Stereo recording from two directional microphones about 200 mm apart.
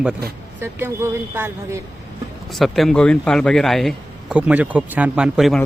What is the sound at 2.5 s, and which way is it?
Speech, centre (ahead or behind).